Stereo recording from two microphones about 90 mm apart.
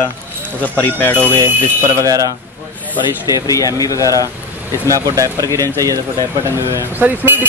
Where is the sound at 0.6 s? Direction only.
20° left (ahead or behind).